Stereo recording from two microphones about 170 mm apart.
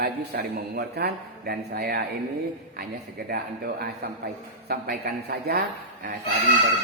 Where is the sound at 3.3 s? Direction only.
60° right (ahead or behind).